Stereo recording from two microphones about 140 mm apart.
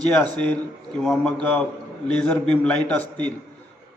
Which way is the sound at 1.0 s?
5° left (ahead or behind).